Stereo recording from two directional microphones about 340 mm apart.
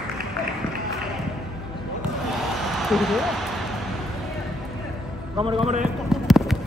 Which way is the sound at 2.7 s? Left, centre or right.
Centre.